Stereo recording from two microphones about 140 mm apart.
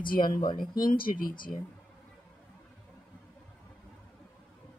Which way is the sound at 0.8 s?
85° left.